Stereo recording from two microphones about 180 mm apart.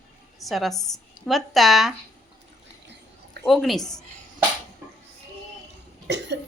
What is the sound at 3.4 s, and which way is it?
Speech, centre (ahead or behind).